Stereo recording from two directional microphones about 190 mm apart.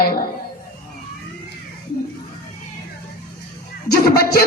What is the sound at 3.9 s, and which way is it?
Speech, 55° left (ahead or behind).